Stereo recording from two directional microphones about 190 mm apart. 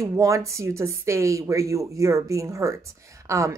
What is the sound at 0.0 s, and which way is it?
Speech, 15° right (ahead or behind).